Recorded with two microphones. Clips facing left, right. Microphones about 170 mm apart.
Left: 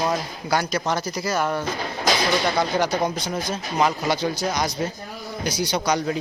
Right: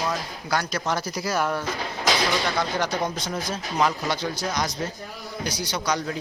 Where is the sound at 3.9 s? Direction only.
15° left (ahead or behind).